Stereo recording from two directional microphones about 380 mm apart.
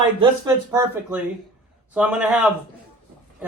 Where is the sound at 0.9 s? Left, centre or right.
Centre.